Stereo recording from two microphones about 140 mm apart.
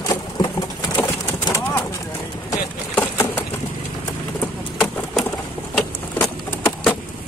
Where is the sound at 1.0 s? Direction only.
20° left (ahead or behind).